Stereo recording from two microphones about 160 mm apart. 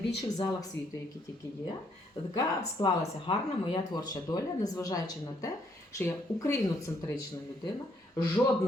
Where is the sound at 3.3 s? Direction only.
35° left (ahead or behind).